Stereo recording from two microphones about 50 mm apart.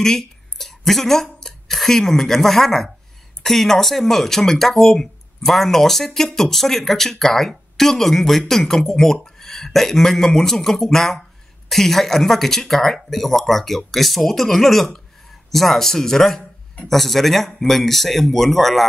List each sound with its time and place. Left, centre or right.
0.0 s speech: centre